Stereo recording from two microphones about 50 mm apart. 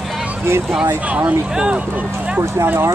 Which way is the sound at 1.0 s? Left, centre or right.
Right.